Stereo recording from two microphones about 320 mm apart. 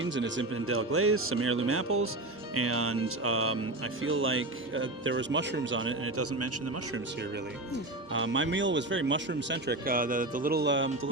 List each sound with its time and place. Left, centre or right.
0.0 s speech: right
8.1 s speech: right